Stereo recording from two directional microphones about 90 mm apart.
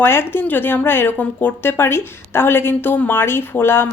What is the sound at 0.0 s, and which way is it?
A woman's voice, 25° left (ahead or behind).